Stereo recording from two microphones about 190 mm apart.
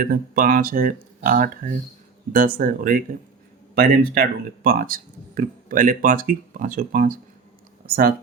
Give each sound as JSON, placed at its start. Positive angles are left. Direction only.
{"t": 0.0, "sound": "speech", "side_deg": -45}